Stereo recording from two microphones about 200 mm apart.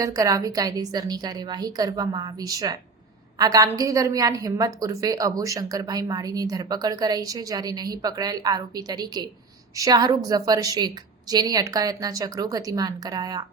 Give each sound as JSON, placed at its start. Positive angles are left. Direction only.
{"t": 0.0, "sound": "a woman's voice", "side_deg": -15}